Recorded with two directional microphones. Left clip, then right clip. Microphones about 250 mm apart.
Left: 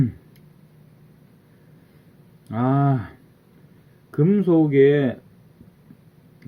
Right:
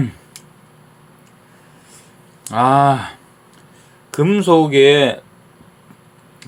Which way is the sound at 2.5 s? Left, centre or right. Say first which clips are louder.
Right 11 dB; left.